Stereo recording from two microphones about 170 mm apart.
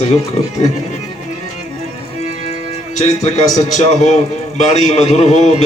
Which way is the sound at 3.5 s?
45° left (ahead or behind).